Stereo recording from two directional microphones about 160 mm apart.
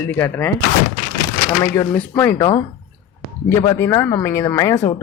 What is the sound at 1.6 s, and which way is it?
Speech, 15° left (ahead or behind).